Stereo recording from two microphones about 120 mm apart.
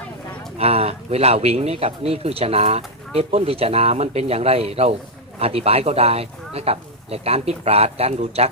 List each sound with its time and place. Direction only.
0.6 s speech: 55° right (ahead or behind)